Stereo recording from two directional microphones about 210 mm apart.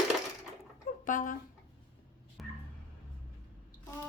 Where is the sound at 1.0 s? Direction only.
40° left (ahead or behind).